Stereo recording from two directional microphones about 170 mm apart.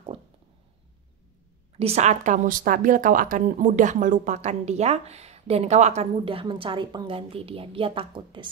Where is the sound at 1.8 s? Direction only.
40° right (ahead or behind).